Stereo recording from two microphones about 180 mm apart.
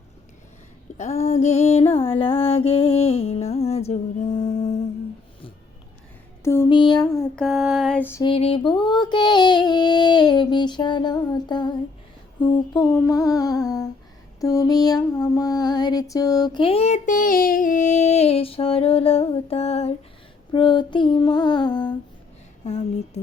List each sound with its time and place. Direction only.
0.9 s music: 40° left (ahead or behind)
6.4 s a sound: 15° left (ahead or behind)
7.3 s a sound: centre (ahead or behind)
8.2 s female singing: 30° left (ahead or behind)
14.4 s music: 20° left (ahead or behind); by 19.9 s 35° left (ahead or behind)
20.5 s female singing: 25° left (ahead or behind)
22.6 s music: 40° left (ahead or behind)